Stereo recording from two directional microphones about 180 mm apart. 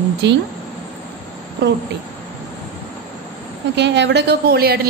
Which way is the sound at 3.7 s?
75° right (ahead or behind).